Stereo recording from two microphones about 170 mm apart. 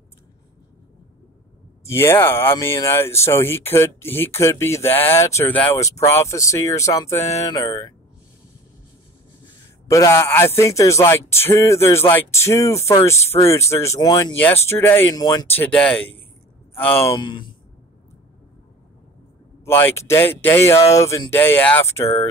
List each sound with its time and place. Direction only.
1.9 s speech: 15° left (ahead or behind)
9.8 s speech: 20° left (ahead or behind)
15.5 s speech: 10° left (ahead or behind)
17.0 s speech: 30° left (ahead or behind)
19.6 s speech: 15° left (ahead or behind)